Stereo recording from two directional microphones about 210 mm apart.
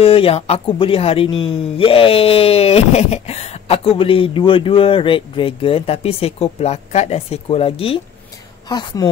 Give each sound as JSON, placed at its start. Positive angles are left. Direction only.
{"t": 0.0, "sound": "a woman's voice", "side_deg": 25}